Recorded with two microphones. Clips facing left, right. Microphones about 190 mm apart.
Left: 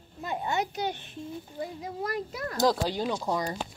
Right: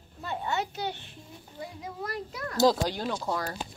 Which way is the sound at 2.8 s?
10° left (ahead or behind).